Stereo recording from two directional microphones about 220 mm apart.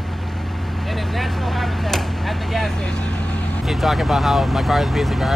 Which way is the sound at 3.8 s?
Centre (ahead or behind).